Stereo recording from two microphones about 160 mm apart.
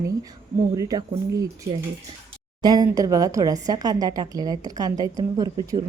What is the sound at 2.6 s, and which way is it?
A woman's voice, 25° right (ahead or behind).